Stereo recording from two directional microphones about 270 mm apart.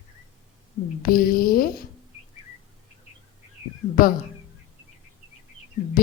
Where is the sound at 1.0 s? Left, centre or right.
Left.